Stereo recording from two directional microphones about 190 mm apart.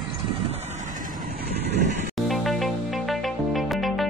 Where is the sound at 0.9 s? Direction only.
45° right (ahead or behind).